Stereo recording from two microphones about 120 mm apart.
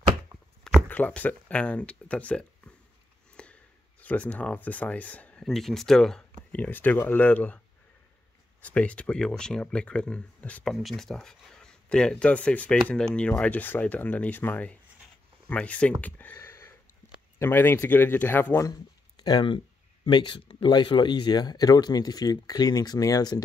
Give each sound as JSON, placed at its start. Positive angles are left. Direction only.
{"t": 0.8, "sound": "speech", "side_deg": 15}
{"t": 6.5, "sound": "speech", "side_deg": 15}
{"t": 16.3, "sound": "a sound", "side_deg": 25}
{"t": 17.4, "sound": "speech", "side_deg": 20}
{"t": 18.7, "sound": "speech", "side_deg": 35}